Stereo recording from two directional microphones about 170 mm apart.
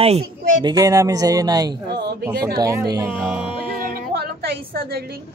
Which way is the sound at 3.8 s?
60° right (ahead or behind).